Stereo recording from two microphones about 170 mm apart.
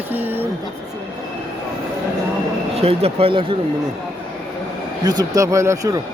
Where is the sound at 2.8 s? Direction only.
35° right (ahead or behind).